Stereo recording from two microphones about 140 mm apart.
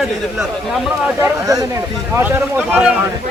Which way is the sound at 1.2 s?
25° right (ahead or behind).